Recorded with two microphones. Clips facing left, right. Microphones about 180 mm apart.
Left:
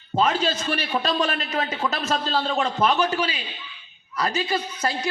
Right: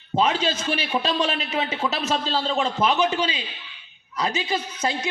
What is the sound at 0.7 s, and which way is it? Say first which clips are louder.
A man's voice: even; 15° right (ahead or behind).